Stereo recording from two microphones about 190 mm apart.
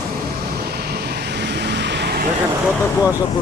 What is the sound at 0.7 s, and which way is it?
Vehicle, 55° right (ahead or behind).